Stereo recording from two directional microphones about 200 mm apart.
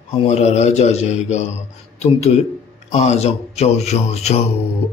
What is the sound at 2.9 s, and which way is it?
Speech, 35° left (ahead or behind).